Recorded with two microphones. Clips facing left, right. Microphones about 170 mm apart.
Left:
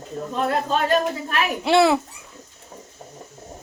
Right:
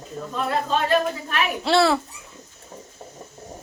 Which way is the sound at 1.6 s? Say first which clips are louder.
Left 2 dB; 15° left (ahead or behind).